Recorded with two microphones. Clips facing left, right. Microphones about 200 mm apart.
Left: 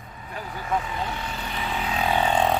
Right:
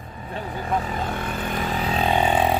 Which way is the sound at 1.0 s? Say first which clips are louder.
Right 4 dB; 50° right (ahead or behind).